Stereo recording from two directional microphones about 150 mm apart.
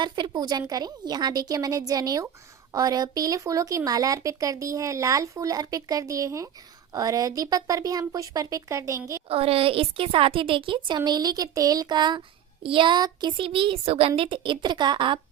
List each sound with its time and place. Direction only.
0.0 s speech: 30° right (ahead or behind)
9.3 s a woman's voice: 40° right (ahead or behind)